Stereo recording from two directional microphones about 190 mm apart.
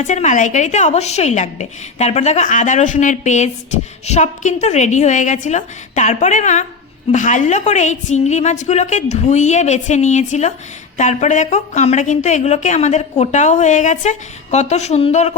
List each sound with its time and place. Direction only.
0.0 s a woman's voice: 40° left (ahead or behind)